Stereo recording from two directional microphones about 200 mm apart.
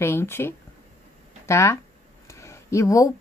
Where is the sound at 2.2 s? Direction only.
15° left (ahead or behind).